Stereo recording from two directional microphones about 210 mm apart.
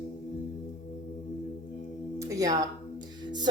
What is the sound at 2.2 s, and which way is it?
Speech, 15° right (ahead or behind).